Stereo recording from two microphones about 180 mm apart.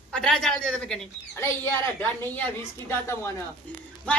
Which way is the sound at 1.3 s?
15° left (ahead or behind).